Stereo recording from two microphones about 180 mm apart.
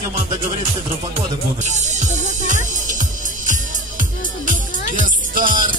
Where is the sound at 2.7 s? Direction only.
45° right (ahead or behind).